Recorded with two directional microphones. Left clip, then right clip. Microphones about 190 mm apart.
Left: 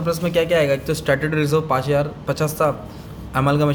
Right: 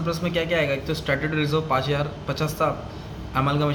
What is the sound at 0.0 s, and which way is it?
A man's voice, 45° left (ahead or behind).